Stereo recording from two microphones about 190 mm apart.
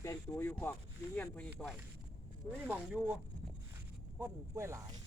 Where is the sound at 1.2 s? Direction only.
5° left (ahead or behind); by 3.1 s 10° right (ahead or behind).